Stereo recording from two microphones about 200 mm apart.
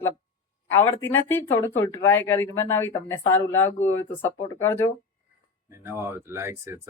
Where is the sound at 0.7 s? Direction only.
10° left (ahead or behind).